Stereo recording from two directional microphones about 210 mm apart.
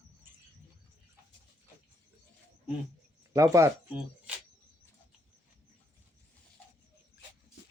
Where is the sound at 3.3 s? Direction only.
15° right (ahead or behind).